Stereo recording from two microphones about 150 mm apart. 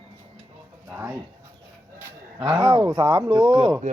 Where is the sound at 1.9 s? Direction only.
15° right (ahead or behind).